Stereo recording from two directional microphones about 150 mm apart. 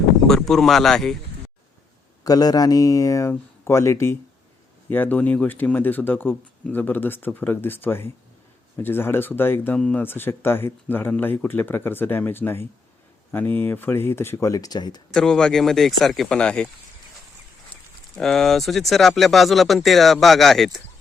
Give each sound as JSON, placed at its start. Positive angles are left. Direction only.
{"t": 0.3, "sound": "speech", "side_deg": 5}
{"t": 2.2, "sound": "speech", "side_deg": 25}
{"t": 15.1, "sound": "speech", "side_deg": 5}
{"t": 18.2, "sound": "speech", "side_deg": 5}